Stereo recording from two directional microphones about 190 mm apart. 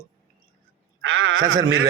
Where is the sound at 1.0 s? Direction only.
90° right.